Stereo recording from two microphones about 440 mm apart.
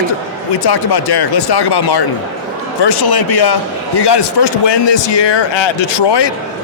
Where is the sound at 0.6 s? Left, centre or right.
Left.